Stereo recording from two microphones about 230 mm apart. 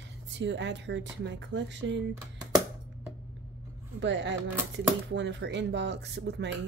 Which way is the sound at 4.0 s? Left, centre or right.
Right.